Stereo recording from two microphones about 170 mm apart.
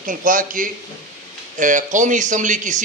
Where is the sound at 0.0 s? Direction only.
55° right (ahead or behind).